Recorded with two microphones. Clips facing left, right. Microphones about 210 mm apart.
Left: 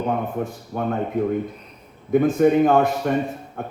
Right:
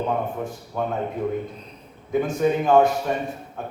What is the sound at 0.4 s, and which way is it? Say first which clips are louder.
Speech: left 2 dB; 60° left (ahead or behind).